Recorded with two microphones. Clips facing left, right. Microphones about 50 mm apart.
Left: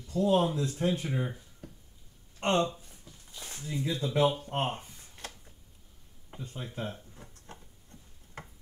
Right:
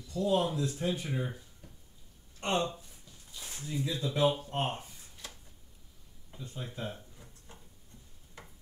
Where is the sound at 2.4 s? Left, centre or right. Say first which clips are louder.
Left 4 dB; left.